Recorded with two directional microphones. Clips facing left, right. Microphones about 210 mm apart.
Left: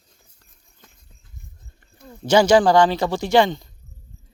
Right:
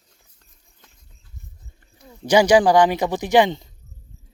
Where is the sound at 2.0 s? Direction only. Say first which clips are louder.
Even; 15° right (ahead or behind).